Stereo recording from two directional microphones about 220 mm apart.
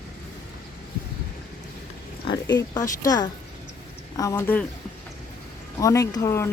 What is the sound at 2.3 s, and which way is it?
Speech, 20° left (ahead or behind).